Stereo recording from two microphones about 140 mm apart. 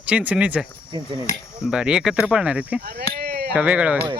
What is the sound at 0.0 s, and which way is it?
Speech, 10° right (ahead or behind).